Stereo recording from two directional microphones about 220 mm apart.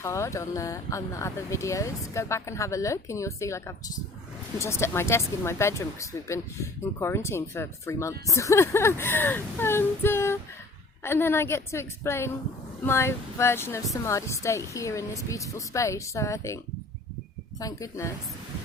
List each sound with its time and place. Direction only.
0.0 s speech: 15° left (ahead or behind)
17.6 s speech: 15° left (ahead or behind)